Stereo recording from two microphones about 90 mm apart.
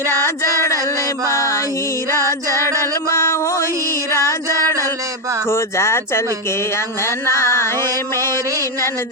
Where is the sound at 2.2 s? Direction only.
30° left (ahead or behind).